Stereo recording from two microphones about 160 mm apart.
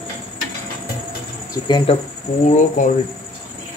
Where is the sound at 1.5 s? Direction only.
25° left (ahead or behind).